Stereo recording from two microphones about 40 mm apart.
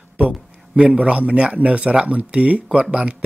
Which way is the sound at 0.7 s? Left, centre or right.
Right.